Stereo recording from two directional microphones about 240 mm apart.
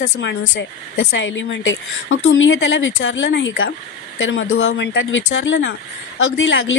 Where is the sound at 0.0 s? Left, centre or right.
Left.